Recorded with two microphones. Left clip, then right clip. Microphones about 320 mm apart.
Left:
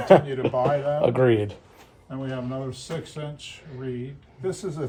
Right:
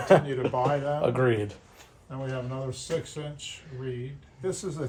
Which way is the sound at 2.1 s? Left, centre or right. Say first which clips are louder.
Left 3 dB; centre.